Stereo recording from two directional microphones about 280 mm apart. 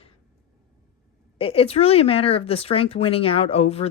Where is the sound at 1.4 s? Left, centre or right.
Centre.